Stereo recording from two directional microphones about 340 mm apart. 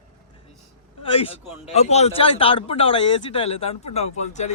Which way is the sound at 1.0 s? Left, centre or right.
Centre.